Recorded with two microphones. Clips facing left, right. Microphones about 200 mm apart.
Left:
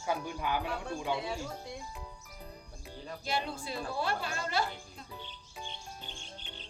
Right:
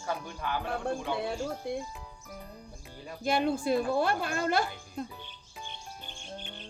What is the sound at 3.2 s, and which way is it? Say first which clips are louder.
A woman's voice: right 9 dB; 50° right (ahead or behind).